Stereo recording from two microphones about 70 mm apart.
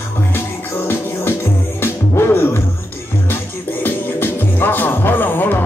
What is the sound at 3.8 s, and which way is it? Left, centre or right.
Music, left.